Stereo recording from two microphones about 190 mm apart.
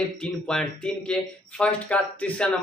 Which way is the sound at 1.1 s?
5° left (ahead or behind).